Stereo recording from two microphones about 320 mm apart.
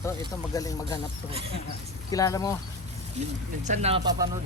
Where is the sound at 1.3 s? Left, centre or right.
Centre.